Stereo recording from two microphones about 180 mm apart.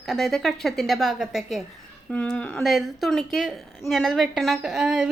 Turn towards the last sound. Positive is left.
turn(degrees=-5)  # may be behind; listen again after turning